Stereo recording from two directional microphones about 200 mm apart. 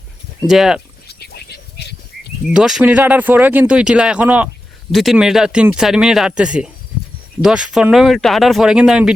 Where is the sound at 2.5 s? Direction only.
5° right (ahead or behind).